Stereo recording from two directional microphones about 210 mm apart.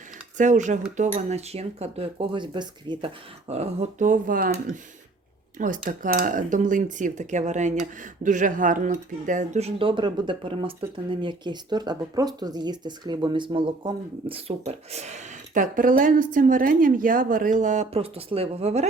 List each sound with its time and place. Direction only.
0.3 s speech: 35° right (ahead or behind)